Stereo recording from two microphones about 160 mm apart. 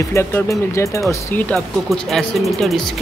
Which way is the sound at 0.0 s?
15° left (ahead or behind).